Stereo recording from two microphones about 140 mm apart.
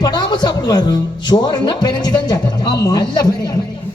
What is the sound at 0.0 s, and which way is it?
Speech, 30° left (ahead or behind).